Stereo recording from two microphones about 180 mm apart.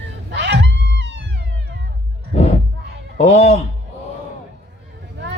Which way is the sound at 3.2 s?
40° left (ahead or behind).